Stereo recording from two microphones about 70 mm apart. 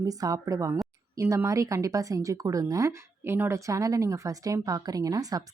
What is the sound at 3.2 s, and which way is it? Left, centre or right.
Speech, right.